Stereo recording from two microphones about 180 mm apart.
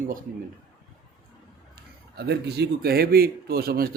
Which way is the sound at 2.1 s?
65° right (ahead or behind).